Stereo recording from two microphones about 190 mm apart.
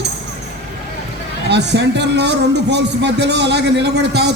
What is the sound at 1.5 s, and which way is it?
Speech, 65° right (ahead or behind).